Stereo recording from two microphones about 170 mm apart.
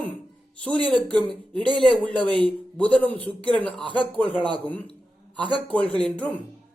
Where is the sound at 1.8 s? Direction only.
10° left (ahead or behind).